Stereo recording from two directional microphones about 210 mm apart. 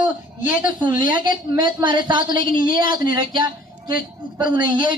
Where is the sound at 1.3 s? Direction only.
40° left (ahead or behind).